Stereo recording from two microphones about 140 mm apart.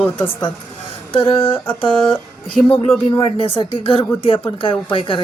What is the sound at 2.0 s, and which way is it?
Speech, 5° left (ahead or behind).